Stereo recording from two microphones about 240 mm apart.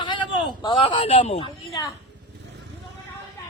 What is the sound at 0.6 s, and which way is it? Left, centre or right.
Speech, centre.